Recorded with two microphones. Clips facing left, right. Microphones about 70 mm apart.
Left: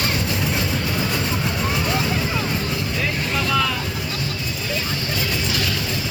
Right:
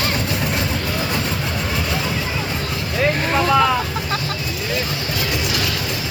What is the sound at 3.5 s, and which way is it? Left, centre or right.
Vehicle, right.